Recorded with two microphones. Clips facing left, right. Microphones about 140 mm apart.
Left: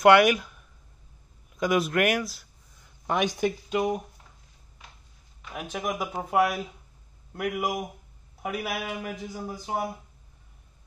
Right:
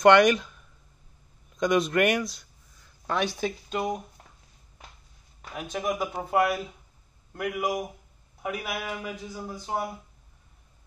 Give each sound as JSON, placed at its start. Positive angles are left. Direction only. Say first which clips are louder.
{"t": 0.0, "sound": "a man's voice", "louder": "even", "side_deg": 5}
{"t": 3.1, "sound": "speech", "louder": "left 2 dB", "side_deg": 15}
{"t": 5.6, "sound": "a man's voice", "louder": "right 2 dB", "side_deg": 5}